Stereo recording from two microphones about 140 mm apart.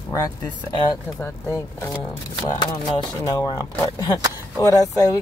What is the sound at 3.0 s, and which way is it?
Speech, 30° left (ahead or behind).